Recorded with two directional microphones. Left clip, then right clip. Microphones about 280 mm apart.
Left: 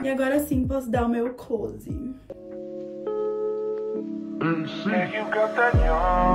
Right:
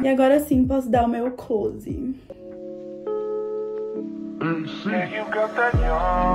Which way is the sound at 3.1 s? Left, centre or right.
Centre.